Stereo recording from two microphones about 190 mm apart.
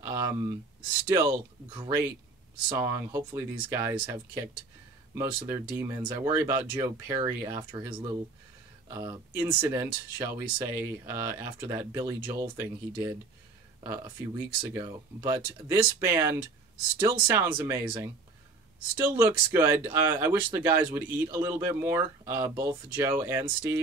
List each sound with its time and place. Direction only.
0.0 s a sound: 15° right (ahead or behind)
1.0 s speech: 15° right (ahead or behind)
7.7 s speech: 25° right (ahead or behind)
19.1 s speech: 10° right (ahead or behind)